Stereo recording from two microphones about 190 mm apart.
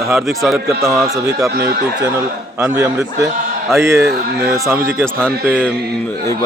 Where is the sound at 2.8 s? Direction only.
15° right (ahead or behind).